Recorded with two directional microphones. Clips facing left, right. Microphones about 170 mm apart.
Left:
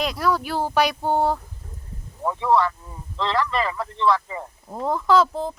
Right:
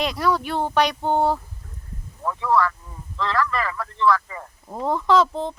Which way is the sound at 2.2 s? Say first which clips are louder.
Left 1 dB; 25° left (ahead or behind).